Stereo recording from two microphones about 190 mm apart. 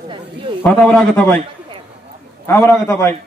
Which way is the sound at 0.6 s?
5° left (ahead or behind).